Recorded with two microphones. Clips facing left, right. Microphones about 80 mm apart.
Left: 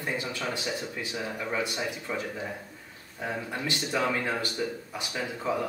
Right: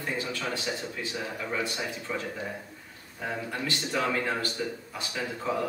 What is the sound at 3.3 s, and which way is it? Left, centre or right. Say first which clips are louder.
A man's voice: even; centre.